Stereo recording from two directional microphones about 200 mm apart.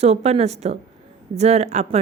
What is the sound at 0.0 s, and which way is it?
A woman's voice, 30° right (ahead or behind).